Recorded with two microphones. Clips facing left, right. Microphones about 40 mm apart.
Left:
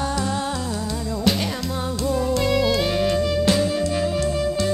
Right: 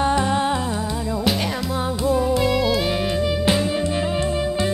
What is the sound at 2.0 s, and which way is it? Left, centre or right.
Music, centre.